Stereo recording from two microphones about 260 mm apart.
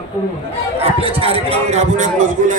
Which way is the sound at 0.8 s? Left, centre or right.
Right.